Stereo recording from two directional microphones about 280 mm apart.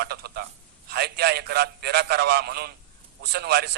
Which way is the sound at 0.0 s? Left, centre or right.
Right.